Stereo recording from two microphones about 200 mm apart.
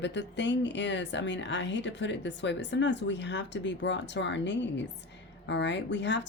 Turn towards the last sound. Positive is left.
turn(degrees=60)  # may be behind; listen again after turning